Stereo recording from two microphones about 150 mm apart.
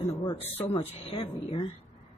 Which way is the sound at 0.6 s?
40° left (ahead or behind).